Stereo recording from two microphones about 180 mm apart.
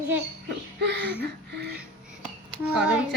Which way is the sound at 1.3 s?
65° right (ahead or behind).